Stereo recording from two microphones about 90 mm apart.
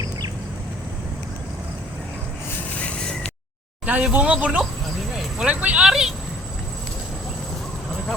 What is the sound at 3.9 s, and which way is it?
Speech, 15° right (ahead or behind).